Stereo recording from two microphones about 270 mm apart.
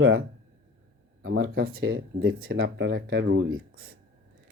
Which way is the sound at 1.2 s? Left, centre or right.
Right.